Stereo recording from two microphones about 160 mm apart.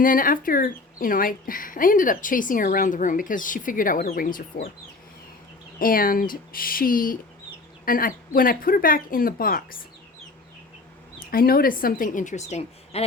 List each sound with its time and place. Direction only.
0.0 s speech: 60° left (ahead or behind)
5.8 s speech: 65° left (ahead or behind)
11.3 s speech: 65° left (ahead or behind); by 13.0 s 45° left (ahead or behind)